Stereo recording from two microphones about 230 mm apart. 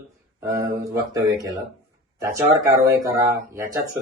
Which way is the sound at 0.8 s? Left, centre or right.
Centre.